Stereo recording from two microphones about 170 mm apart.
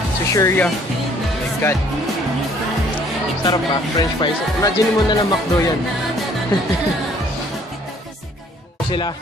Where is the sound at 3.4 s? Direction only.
25° left (ahead or behind).